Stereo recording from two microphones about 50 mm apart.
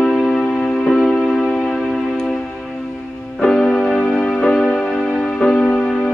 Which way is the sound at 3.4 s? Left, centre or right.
Centre.